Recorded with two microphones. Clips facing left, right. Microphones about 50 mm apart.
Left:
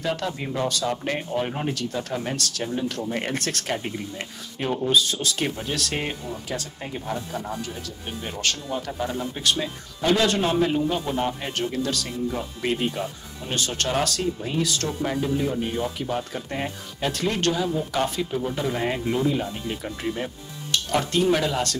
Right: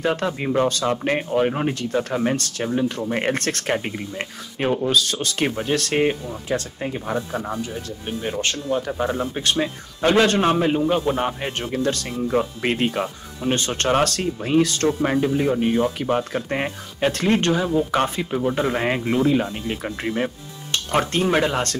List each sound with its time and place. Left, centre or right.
0.0 s speech: right
6.8 s speech: centre
7.2 s speech: right
8.2 s speech: right
10.7 s speech: right